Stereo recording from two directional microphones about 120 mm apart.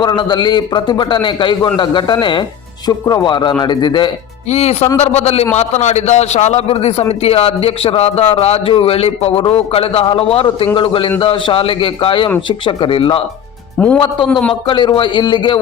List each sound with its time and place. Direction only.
0.0 s a man's voice: 40° left (ahead or behind)
4.4 s a man's voice: 65° left (ahead or behind)
13.7 s a man's voice: 10° left (ahead or behind)
14.7 s a man's voice: 40° left (ahead or behind)